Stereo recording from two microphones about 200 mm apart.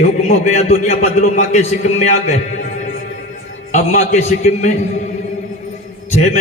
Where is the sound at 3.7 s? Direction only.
35° left (ahead or behind).